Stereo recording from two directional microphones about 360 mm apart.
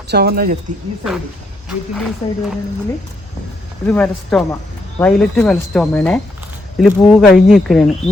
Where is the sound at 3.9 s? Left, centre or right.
Centre.